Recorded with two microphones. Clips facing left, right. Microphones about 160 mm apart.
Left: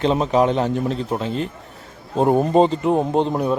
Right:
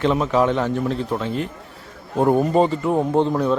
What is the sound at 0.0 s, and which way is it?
A man's voice, 25° left (ahead or behind).